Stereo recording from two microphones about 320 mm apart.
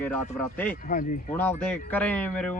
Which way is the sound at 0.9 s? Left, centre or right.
Left.